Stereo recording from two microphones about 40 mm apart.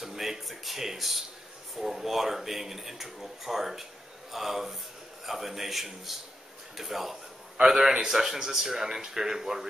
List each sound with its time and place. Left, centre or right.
0.0 s a man's voice: centre